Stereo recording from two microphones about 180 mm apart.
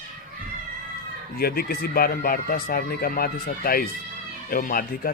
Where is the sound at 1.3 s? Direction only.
55° left (ahead or behind).